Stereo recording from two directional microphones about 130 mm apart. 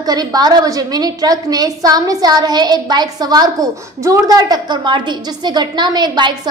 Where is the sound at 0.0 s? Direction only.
30° right (ahead or behind).